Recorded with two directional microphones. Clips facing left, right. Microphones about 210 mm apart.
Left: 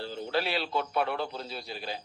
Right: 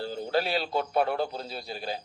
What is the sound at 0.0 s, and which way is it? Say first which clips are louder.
A man's voice: right 3 dB; 40° right (ahead or behind).